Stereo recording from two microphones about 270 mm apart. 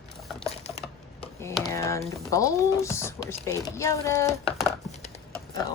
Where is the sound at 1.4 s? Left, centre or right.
Centre.